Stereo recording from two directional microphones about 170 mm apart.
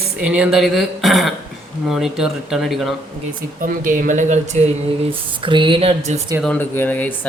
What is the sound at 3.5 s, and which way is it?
Speech, 50° right (ahead or behind).